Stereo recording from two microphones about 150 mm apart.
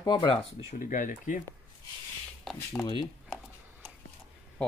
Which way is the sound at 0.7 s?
60° left (ahead or behind).